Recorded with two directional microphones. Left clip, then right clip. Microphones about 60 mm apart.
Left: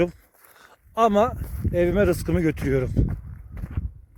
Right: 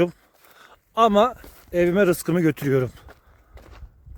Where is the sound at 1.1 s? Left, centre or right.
Right.